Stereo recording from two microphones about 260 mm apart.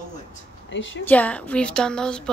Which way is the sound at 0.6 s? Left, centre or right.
Left.